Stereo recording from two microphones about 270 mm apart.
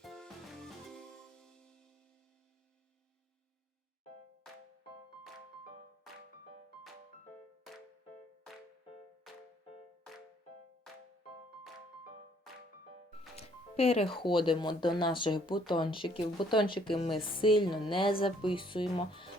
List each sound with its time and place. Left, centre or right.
0.0 s music: centre
13.3 s speech: left